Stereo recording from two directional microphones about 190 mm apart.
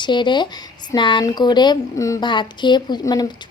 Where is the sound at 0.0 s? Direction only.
25° left (ahead or behind).